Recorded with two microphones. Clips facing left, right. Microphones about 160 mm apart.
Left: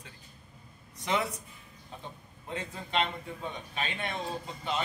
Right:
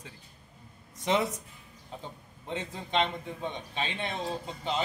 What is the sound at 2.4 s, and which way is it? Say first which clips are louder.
A man's voice: right 2 dB; 25° right (ahead or behind).